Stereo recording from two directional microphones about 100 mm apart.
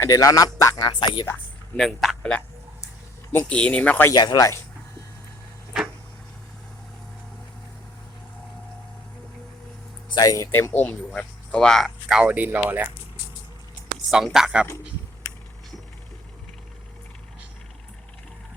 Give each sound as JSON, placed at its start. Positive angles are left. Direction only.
{"t": 0.0, "sound": "speech", "side_deg": 35}
{"t": 1.7, "sound": "speech", "side_deg": 5}
{"t": 4.1, "sound": "speech", "side_deg": 45}
{"t": 10.1, "sound": "speech", "side_deg": 40}
{"t": 10.5, "sound": "speech", "side_deg": 20}
{"t": 14.3, "sound": "speech", "side_deg": -5}